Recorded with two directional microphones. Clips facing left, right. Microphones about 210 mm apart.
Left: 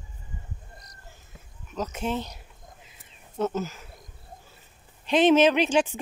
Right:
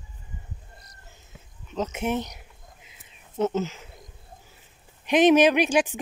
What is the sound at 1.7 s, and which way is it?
Speech, 25° right (ahead or behind).